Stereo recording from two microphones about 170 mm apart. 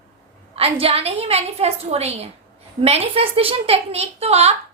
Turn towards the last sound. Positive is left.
turn(degrees=-40)  # may be behind; listen again after turning